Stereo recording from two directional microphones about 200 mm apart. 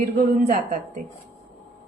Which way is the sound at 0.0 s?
40° right (ahead or behind).